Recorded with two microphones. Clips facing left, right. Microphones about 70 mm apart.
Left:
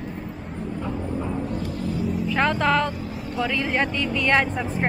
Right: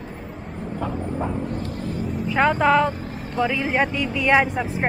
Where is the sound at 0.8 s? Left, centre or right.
Right.